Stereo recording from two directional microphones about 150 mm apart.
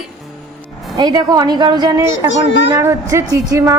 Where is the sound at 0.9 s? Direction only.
25° right (ahead or behind).